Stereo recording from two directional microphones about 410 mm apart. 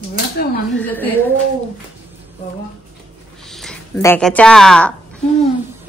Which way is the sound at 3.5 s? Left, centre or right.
Centre.